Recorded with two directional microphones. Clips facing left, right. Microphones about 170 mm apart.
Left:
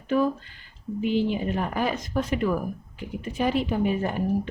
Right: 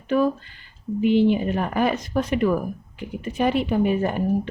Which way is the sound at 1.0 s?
65° right (ahead or behind).